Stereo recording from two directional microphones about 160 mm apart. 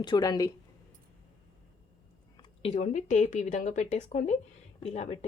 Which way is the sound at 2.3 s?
35° left (ahead or behind).